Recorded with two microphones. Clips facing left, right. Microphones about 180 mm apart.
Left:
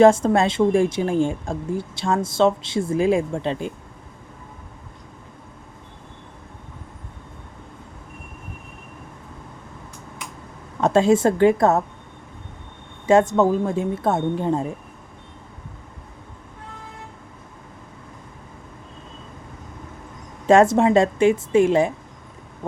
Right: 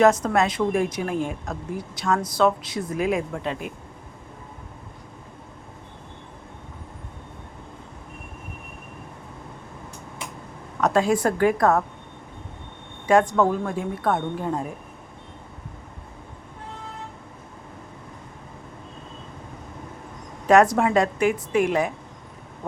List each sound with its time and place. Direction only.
0.0 s a woman's voice: 30° left (ahead or behind)
10.8 s a woman's voice: 25° left (ahead or behind)
13.1 s a woman's voice: 25° left (ahead or behind)
20.5 s a woman's voice: 25° left (ahead or behind)